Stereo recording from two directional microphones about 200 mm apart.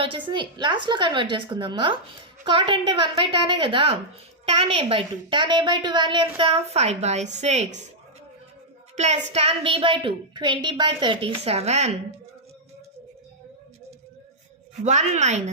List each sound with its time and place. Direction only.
0.3 s a woman's voice: 25° right (ahead or behind)
9.0 s a woman's voice: 35° right (ahead or behind)
14.8 s a woman's voice: 35° right (ahead or behind)